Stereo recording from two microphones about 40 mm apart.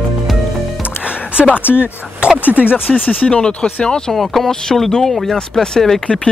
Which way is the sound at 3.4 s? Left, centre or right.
Left.